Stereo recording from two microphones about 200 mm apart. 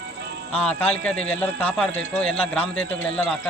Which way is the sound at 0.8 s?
5° left (ahead or behind).